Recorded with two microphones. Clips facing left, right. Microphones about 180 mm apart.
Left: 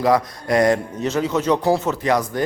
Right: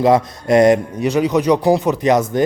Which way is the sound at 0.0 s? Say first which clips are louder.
Right 4 dB; 25° right (ahead or behind).